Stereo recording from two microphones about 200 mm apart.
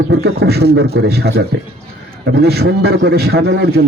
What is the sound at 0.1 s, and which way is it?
A man's voice, 55° right (ahead or behind).